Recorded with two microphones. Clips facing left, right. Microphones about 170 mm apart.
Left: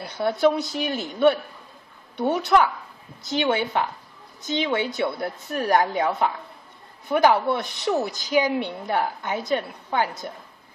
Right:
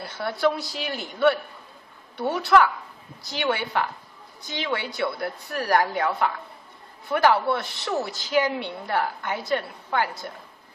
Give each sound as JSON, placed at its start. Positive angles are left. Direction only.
{"t": 0.0, "sound": "a woman's voice", "side_deg": 20}